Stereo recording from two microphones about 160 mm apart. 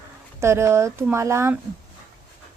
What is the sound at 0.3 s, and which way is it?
A woman's voice, 15° right (ahead or behind).